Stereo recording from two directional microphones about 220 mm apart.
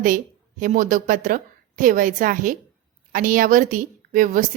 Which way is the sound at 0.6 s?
35° right (ahead or behind).